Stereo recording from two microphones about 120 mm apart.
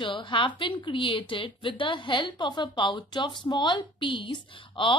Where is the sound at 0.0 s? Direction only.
45° left (ahead or behind).